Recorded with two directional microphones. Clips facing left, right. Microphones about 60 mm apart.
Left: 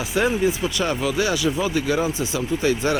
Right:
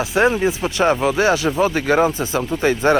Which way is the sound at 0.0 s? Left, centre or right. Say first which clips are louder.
Right 4 dB; right.